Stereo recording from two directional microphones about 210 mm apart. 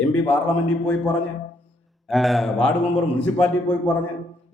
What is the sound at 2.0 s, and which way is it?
A man's voice, centre (ahead or behind).